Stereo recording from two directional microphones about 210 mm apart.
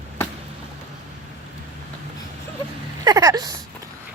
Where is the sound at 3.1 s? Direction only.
15° right (ahead or behind).